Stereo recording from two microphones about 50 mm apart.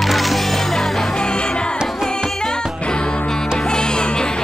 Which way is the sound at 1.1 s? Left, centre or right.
Centre.